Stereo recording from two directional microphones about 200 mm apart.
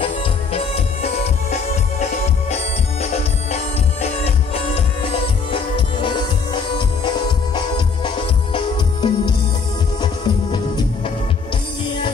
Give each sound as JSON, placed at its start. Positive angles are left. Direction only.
{"t": 0.0, "sound": "music", "side_deg": 30}
{"t": 3.5, "sound": "music", "side_deg": 30}